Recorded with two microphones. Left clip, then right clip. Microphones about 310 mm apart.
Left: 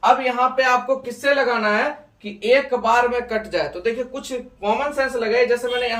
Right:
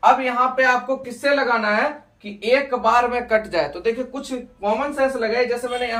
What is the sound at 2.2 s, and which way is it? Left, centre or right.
Speech, centre.